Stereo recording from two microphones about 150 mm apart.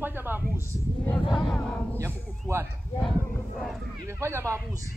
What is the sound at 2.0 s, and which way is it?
Speech, 20° right (ahead or behind).